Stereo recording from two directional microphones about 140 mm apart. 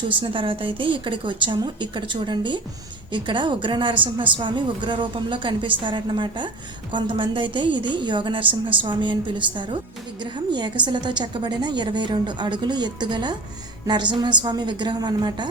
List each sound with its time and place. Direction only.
0.1 s a woman's voice: 40° right (ahead or behind)